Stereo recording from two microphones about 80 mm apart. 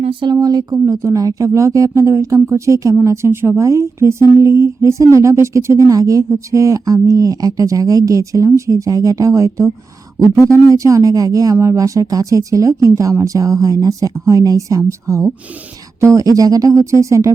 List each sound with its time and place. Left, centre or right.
0.1 s speech: right
0.3 s speech: right